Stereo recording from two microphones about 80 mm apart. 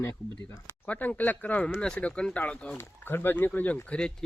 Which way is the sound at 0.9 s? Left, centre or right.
Left.